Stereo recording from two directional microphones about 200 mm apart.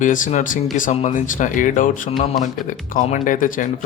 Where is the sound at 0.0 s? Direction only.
40° left (ahead or behind).